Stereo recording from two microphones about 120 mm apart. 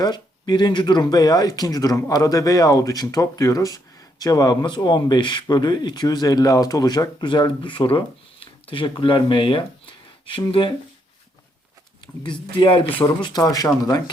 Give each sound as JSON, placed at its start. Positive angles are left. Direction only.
{"t": 0.0, "sound": "speech", "side_deg": 35}
{"t": 12.2, "sound": "speech", "side_deg": 45}
{"t": 13.4, "sound": "speech", "side_deg": 30}